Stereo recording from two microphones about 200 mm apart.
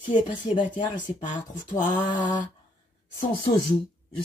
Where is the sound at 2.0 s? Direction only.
25° left (ahead or behind).